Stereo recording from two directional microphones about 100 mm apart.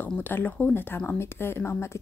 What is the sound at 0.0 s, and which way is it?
Speech, 20° left (ahead or behind).